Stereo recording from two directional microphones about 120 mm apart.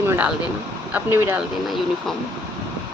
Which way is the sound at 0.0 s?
20° right (ahead or behind).